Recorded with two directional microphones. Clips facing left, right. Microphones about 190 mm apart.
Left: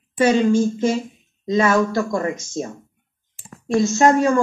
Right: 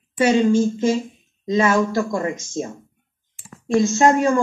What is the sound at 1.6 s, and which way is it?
Speech, 15° right (ahead or behind).